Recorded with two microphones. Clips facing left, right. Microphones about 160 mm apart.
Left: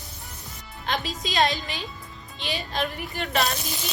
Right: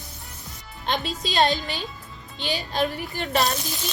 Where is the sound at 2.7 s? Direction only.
35° right (ahead or behind).